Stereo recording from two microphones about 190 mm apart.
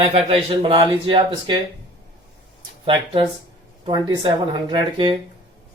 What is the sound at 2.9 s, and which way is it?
Speech, 25° right (ahead or behind).